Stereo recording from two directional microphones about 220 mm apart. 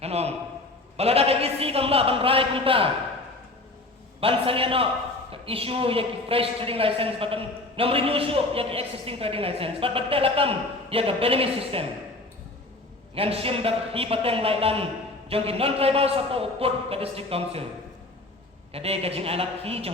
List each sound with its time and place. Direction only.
0.0 s a sound: 30° right (ahead or behind)
0.9 s a woman's voice: 25° right (ahead or behind)
4.2 s a woman's voice: 25° right (ahead or behind)
13.1 s a woman's voice: 25° right (ahead or behind)
18.7 s a woman's voice: 25° right (ahead or behind)